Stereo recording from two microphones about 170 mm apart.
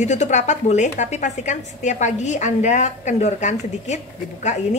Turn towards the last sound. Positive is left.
turn(degrees=45)  # may be behind; listen again after turning